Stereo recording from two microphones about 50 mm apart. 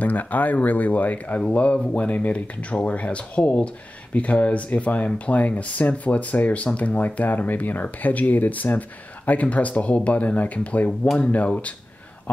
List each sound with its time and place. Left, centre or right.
0.0 s speech: left